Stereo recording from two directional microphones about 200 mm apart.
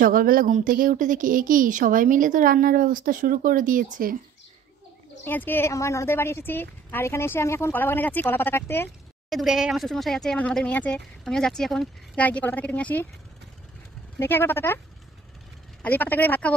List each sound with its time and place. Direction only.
0.0 s speech: 45° right (ahead or behind)
5.2 s a woman's voice: 10° left (ahead or behind)
9.3 s speech: centre (ahead or behind)
14.1 s a woman's voice: 10° left (ahead or behind)
15.8 s a woman's voice: 10° left (ahead or behind)